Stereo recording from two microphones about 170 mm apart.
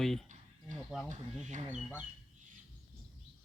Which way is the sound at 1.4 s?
45° right (ahead or behind).